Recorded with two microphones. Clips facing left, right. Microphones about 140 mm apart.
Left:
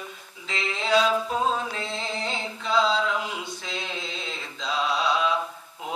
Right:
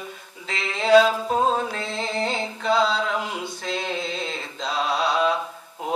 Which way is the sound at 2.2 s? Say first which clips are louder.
Right 6 dB; 50° right (ahead or behind).